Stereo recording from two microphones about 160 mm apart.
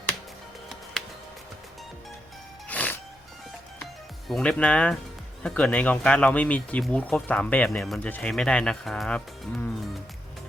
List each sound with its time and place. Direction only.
2.6 s music: 10° left (ahead or behind)
4.3 s speech: 5° left (ahead or behind)